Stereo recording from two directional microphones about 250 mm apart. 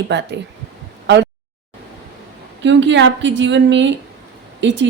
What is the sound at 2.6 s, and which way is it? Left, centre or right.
A woman's voice, right.